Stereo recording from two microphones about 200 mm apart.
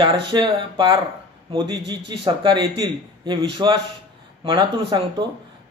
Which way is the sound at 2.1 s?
20° right (ahead or behind).